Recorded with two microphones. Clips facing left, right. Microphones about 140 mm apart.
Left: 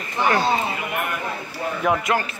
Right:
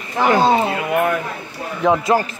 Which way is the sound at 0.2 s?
90° right.